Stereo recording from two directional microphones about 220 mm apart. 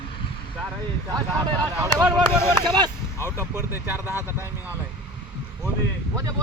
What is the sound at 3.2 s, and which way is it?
Speech, 10° right (ahead or behind).